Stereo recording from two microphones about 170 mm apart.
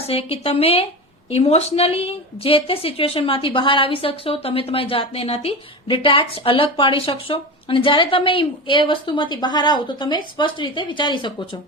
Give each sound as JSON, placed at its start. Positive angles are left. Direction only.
{"t": 0.0, "sound": "a woman's voice", "side_deg": 35}